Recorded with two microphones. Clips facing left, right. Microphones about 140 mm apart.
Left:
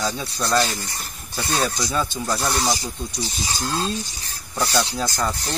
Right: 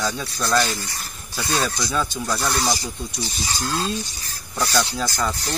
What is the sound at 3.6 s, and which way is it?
Speech, 20° left (ahead or behind).